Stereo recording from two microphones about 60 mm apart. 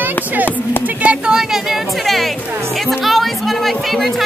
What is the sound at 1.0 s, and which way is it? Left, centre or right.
Speech, centre.